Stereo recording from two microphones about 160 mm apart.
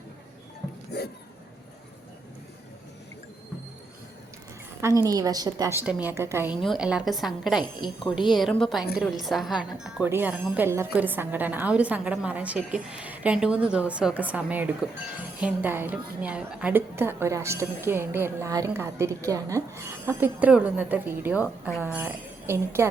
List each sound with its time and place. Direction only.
0.9 s a sound: 90° left
4.8 s a woman's voice: 20° right (ahead or behind)
5.8 s a woman's voice: 10° right (ahead or behind)
7.8 s a woman's voice: 30° left (ahead or behind)
8.3 s a woman's voice: centre (ahead or behind)